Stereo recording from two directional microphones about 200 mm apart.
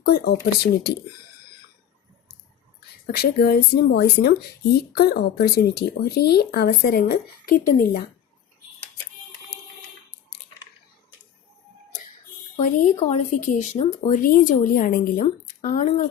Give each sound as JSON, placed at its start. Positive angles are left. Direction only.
{"t": 0.0, "sound": "speech", "side_deg": 50}
{"t": 3.2, "sound": "speech", "side_deg": 50}
{"t": 12.5, "sound": "speech", "side_deg": 40}